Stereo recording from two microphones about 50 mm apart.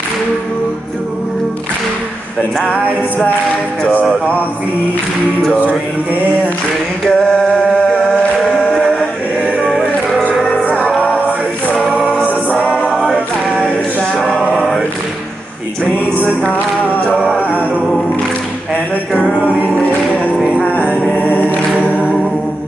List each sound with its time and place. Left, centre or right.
7.1 s a sound: centre
9.6 s music: centre
10.5 s music: left
12.1 s a capella: left
12.9 s a capella: centre
16.4 s music: left
19.6 s music: left